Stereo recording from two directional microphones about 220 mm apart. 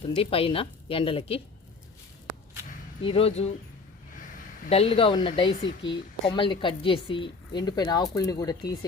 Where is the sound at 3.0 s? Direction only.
25° left (ahead or behind).